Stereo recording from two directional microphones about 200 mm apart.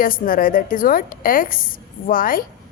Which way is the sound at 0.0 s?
45° left (ahead or behind).